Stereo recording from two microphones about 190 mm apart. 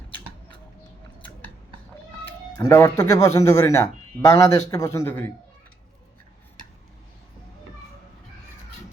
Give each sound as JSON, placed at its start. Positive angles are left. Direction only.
{"t": 2.6, "sound": "a man's voice", "side_deg": 15}